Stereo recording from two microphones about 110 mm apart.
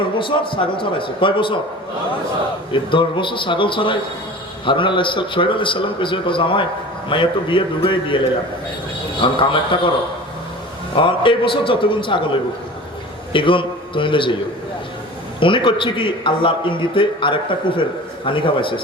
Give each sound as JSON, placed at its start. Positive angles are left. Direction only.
{"t": 0.2, "sound": "a man's voice", "side_deg": 50}
{"t": 2.7, "sound": "a man's voice", "side_deg": 50}
{"t": 9.2, "sound": "a man's voice", "side_deg": 50}
{"t": 10.9, "sound": "a man's voice", "side_deg": 50}
{"t": 13.3, "sound": "a man's voice", "side_deg": 50}
{"t": 15.4, "sound": "a man's voice", "side_deg": 50}